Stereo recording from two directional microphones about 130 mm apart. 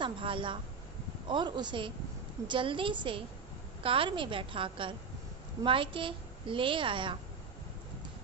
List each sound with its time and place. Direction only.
0.0 s a woman's voice: 40° right (ahead or behind)